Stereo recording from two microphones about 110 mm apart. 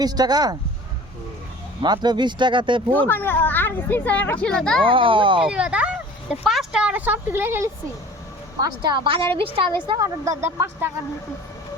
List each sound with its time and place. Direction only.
0.0 s speech: 35° right (ahead or behind)
1.8 s speech: 40° right (ahead or behind)
2.9 s speech: 15° left (ahead or behind)
4.8 s speech: 50° right (ahead or behind)
5.5 s speech: 10° right (ahead or behind)
8.6 s speech: 45° right (ahead or behind)
10.0 s speech: 30° right (ahead or behind)